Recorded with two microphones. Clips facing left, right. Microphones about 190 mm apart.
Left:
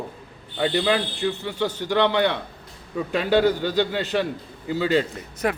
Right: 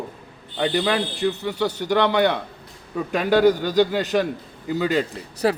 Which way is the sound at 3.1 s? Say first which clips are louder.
Right 3 dB; 45° right (ahead or behind).